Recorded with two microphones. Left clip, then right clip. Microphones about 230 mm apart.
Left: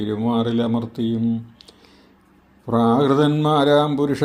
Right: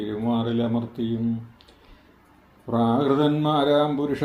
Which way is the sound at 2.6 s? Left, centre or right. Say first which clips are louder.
Left 5 dB; left.